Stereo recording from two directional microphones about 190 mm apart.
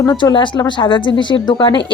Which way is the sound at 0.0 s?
20° left (ahead or behind).